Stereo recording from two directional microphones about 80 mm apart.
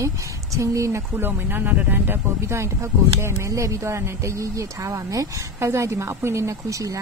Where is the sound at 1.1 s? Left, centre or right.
Right.